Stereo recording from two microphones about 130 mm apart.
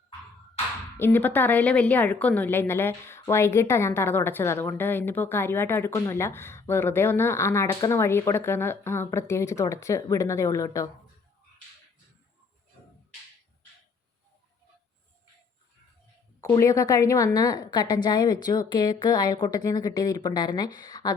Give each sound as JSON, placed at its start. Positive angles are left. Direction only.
{"t": 0.9, "sound": "a woman's voice", "side_deg": 15}
{"t": 16.4, "sound": "a woman's voice", "side_deg": 25}